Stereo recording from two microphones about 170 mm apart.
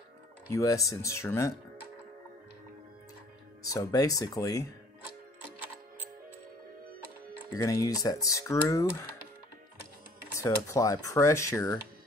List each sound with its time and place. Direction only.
0.5 s speech: 20° left (ahead or behind)
3.6 s speech: 20° left (ahead or behind)
7.5 s speech: 20° left (ahead or behind)
10.3 s speech: 20° left (ahead or behind)